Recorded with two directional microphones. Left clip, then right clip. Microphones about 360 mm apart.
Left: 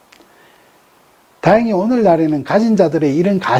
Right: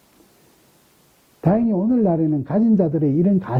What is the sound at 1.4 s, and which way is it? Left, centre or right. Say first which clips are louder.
Speech: left 8 dB; centre.